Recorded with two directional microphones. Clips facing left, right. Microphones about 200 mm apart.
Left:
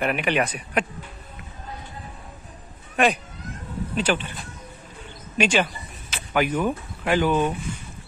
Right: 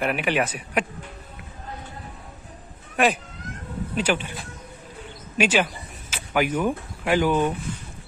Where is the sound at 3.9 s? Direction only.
10° right (ahead or behind).